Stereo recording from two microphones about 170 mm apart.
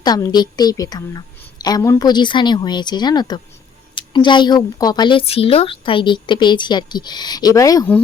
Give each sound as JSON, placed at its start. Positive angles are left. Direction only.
{"t": 0.0, "sound": "speech", "side_deg": 25}